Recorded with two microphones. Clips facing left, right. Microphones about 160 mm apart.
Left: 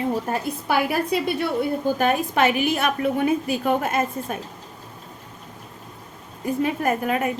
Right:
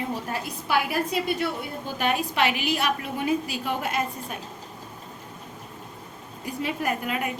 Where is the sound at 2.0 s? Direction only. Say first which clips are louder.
Left 1 dB; 45° left (ahead or behind).